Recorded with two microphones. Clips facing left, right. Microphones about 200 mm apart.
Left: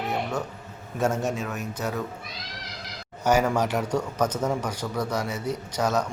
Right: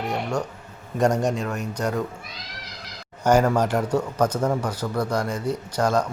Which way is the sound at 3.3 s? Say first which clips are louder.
Right 3 dB; 10° left (ahead or behind).